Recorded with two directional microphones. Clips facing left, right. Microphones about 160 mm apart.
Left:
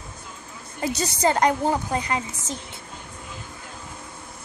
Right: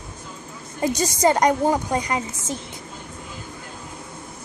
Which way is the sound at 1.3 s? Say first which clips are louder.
Right 2 dB; 15° right (ahead or behind).